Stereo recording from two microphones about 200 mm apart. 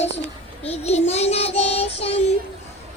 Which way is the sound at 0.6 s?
30° left (ahead or behind).